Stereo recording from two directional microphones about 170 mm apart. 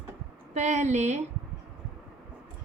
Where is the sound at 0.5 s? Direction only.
40° right (ahead or behind).